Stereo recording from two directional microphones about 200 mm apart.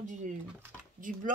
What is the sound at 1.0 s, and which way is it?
Speech, 40° right (ahead or behind).